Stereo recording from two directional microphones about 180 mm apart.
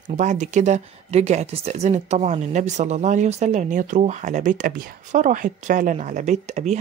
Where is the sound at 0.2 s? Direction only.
40° right (ahead or behind).